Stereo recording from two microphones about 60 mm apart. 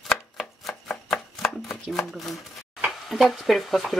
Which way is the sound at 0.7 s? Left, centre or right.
Centre.